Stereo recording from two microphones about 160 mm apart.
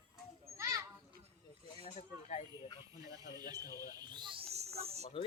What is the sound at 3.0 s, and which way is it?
Speech, 20° right (ahead or behind).